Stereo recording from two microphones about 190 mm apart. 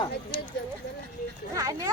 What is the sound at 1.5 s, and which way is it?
Speech, 20° right (ahead or behind).